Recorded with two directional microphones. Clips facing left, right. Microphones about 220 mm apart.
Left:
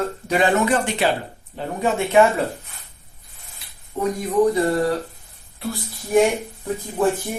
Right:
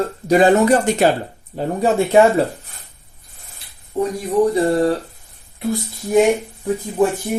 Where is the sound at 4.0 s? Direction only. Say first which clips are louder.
Right 3 dB; 35° right (ahead or behind).